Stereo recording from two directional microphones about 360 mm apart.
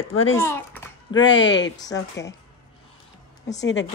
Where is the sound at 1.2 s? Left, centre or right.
Left.